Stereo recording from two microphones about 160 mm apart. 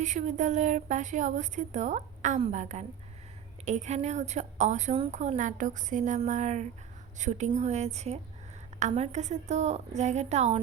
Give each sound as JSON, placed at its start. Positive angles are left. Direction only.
{"t": 0.0, "sound": "a woman's voice", "side_deg": -50}